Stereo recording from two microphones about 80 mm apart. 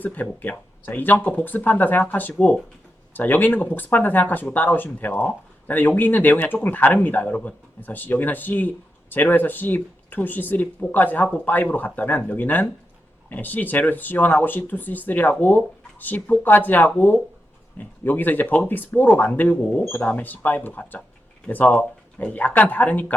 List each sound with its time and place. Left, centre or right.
0.0 s speech: left